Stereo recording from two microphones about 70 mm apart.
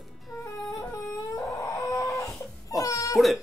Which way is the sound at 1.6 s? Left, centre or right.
Left.